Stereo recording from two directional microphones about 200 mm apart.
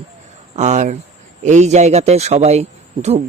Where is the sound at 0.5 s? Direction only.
35° right (ahead or behind).